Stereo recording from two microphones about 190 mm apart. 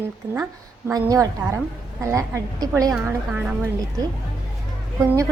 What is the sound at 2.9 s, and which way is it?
Speech, 5° right (ahead or behind).